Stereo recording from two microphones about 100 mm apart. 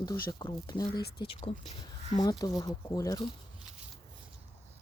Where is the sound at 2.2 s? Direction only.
40° left (ahead or behind).